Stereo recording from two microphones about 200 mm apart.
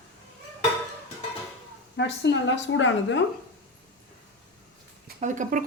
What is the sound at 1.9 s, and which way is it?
A woman's voice, 60° left (ahead or behind).